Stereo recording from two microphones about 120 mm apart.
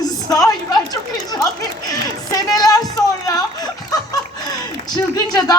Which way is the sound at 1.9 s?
30° left (ahead or behind).